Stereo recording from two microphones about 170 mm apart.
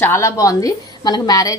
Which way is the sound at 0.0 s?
15° left (ahead or behind).